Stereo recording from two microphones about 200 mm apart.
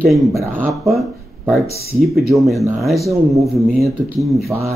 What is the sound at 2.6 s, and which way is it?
Speech, centre (ahead or behind).